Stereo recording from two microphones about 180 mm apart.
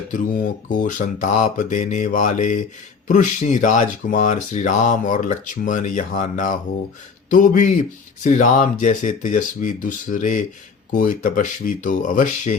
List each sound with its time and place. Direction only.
0.1 s speech: 50° left (ahead or behind)